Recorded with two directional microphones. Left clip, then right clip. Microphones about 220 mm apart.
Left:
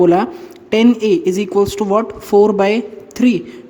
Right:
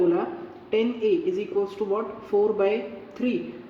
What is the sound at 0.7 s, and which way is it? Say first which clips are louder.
A woman's voice: left 10 dB; 50° left (ahead or behind).